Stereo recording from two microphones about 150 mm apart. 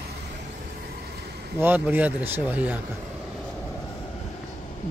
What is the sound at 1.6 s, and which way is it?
Speech, 15° right (ahead or behind).